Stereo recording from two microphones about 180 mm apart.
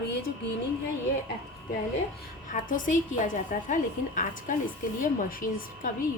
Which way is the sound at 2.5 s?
45° left (ahead or behind).